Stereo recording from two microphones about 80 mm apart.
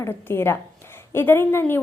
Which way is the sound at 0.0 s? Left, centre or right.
Left.